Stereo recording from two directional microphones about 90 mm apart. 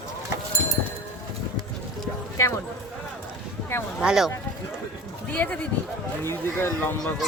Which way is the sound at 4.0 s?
5° right (ahead or behind).